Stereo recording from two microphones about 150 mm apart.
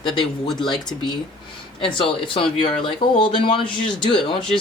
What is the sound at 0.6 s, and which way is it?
Speech, 30° left (ahead or behind).